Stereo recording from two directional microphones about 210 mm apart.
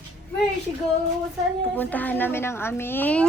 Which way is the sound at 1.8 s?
10° left (ahead or behind).